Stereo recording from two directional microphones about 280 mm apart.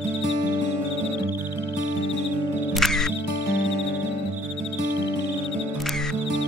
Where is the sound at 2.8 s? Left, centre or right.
Centre.